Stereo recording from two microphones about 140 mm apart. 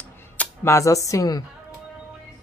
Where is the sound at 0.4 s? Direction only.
20° left (ahead or behind).